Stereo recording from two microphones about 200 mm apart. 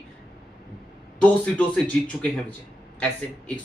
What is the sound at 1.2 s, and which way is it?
Speech, 5° left (ahead or behind).